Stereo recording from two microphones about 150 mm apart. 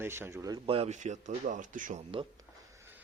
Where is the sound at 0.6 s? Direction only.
40° right (ahead or behind); by 2.0 s 60° right (ahead or behind).